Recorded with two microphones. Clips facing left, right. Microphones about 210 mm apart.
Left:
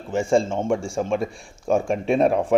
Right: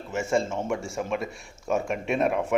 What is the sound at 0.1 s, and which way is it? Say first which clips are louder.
A man's voice: left 6 dB; 30° left (ahead or behind).